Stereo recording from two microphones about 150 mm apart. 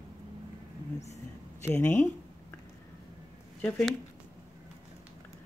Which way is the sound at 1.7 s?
10° left (ahead or behind).